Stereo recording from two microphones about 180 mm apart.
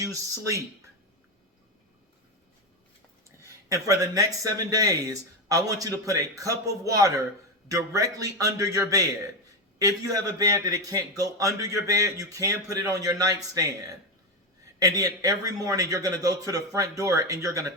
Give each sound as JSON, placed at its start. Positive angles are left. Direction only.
{"t": 0.0, "sound": "speech", "side_deg": -15}
{"t": 3.4, "sound": "speech", "side_deg": -15}
{"t": 14.8, "sound": "speech", "side_deg": -20}